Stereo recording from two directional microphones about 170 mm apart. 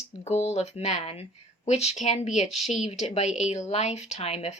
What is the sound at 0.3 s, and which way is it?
Speech, 40° left (ahead or behind).